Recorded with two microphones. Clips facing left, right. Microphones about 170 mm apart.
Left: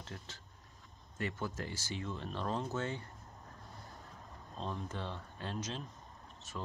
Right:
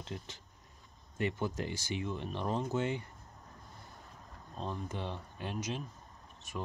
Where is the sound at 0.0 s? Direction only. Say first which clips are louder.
Right 5 dB; 15° right (ahead or behind).